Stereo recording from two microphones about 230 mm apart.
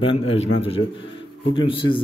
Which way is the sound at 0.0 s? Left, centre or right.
Left.